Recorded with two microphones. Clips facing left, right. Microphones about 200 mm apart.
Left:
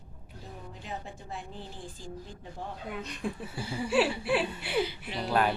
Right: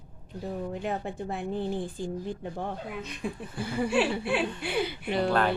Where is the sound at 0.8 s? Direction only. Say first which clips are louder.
Right 9 dB; 60° right (ahead or behind).